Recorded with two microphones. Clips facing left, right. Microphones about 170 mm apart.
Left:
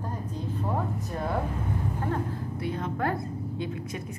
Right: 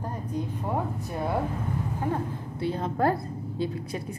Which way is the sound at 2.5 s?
30° right (ahead or behind).